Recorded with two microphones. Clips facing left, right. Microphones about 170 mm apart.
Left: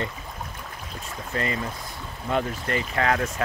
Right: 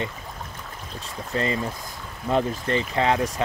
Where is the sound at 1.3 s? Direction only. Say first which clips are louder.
Right 3 dB; 30° right (ahead or behind).